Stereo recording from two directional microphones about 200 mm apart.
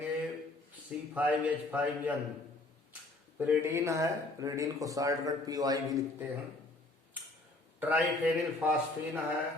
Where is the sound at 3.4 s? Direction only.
10° right (ahead or behind).